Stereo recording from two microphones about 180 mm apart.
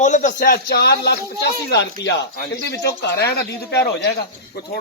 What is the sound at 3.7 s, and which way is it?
Speech, 70° left (ahead or behind).